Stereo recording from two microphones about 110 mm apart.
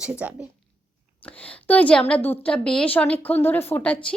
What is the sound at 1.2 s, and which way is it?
A woman's voice, 10° left (ahead or behind).